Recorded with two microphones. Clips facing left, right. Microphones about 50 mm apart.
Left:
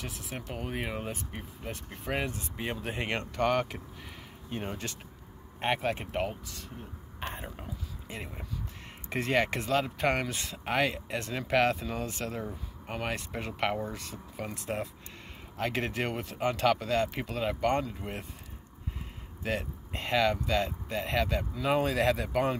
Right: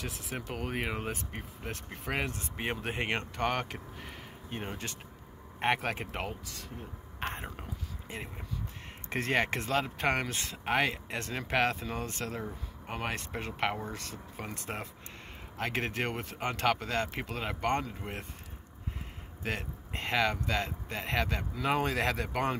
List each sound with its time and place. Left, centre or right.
0.0 s speech: right
0.5 s speech: right
2.6 s speech: right
5.6 s speech: right
7.2 s a sound: right
9.1 s speech: right
13.9 s speech: right
14.7 s speech: right
19.4 s speech: right